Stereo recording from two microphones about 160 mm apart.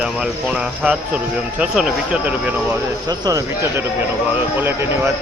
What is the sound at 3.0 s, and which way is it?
Speech, 20° right (ahead or behind).